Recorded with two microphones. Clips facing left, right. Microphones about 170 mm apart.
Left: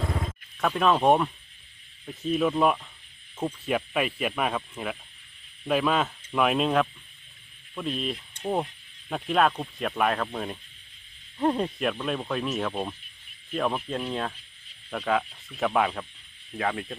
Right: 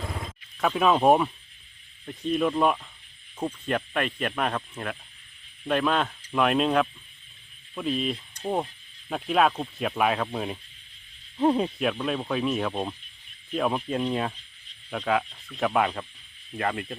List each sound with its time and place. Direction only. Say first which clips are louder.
0.6 s speech: right 1 dB; 5° right (ahead or behind)